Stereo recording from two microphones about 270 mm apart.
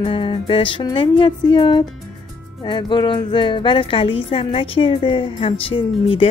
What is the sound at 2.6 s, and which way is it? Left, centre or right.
Speech, centre.